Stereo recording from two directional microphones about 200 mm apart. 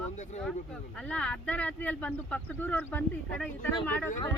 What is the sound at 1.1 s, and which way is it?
Speech, 5° left (ahead or behind).